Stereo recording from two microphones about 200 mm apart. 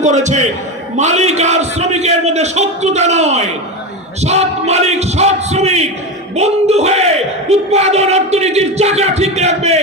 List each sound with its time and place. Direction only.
0.0 s a man's voice: 35° right (ahead or behind)